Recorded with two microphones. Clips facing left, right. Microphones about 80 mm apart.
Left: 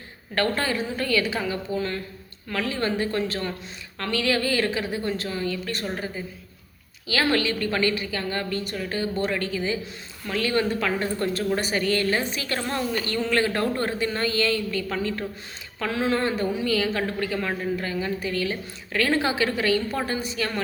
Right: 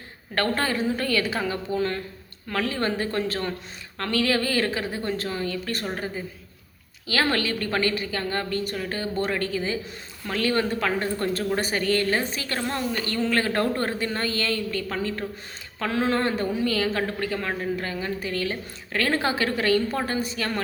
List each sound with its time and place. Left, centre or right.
0.3 s a man's voice: right
14.9 s speech: right
15.8 s a man's voice: right